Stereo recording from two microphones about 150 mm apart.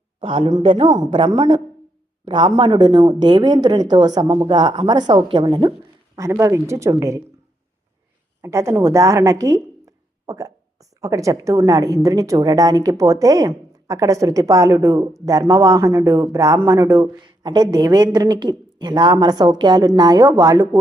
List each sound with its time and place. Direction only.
0.2 s a woman's voice: 35° right (ahead or behind)
6.1 s speech: 20° right (ahead or behind)
8.4 s speech: 20° right (ahead or behind)